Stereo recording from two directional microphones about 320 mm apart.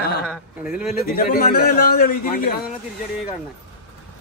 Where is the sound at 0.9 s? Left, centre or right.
Left.